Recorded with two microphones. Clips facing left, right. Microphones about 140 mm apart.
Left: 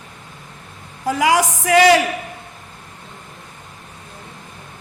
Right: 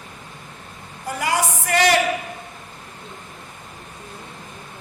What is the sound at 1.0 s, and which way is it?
Music, 90° left.